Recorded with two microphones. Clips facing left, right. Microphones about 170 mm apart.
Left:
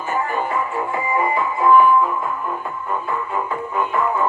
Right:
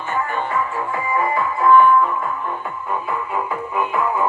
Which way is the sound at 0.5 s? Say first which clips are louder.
Even; 20° left (ahead or behind).